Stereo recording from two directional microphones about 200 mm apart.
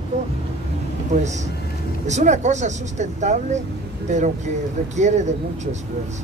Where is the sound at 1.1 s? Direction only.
35° right (ahead or behind).